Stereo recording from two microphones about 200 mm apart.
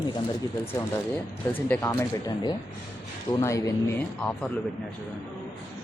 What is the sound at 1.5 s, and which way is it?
Speech, 10° left (ahead or behind).